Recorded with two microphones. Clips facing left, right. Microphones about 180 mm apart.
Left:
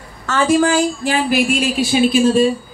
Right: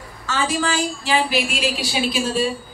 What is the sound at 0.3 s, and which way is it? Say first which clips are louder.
A woman's voice: left 8 dB; 50° left (ahead or behind).